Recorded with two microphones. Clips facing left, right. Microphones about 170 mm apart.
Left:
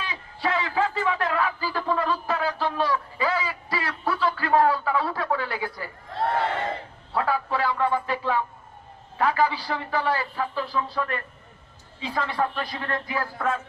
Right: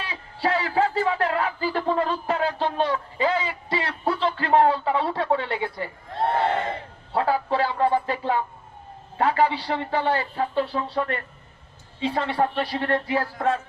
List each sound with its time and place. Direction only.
0.0 s a sound: 30° right (ahead or behind)
7.1 s music: 30° right (ahead or behind)
9.1 s a man's voice: 30° right (ahead or behind)